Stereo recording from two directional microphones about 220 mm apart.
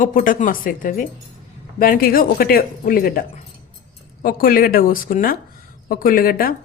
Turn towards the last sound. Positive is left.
turn(degrees=40)  # may be behind; listen again after turning